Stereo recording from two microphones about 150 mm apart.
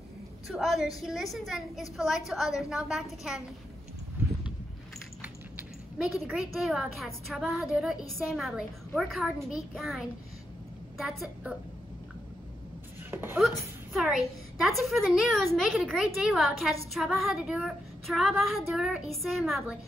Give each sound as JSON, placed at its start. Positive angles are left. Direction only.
{"t": 0.5, "sound": "speech", "side_deg": 0}
{"t": 5.2, "sound": "speech", "side_deg": -5}
{"t": 13.1, "sound": "speech", "side_deg": -15}
{"t": 14.6, "sound": "speech", "side_deg": 0}